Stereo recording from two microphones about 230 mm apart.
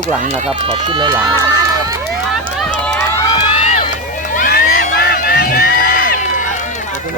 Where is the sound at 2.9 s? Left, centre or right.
Centre.